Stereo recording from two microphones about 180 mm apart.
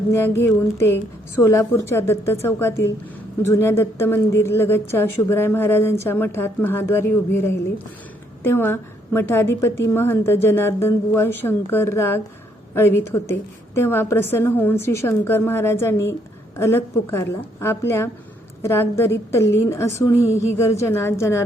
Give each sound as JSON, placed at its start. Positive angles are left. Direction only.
{"t": 0.1, "sound": "a woman's voice", "side_deg": 15}